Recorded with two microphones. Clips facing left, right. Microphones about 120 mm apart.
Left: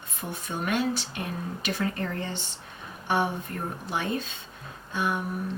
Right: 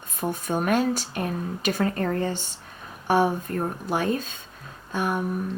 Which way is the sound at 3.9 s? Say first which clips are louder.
Right 4 dB; 45° right (ahead or behind).